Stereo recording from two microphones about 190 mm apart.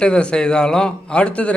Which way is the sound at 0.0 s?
5° left (ahead or behind).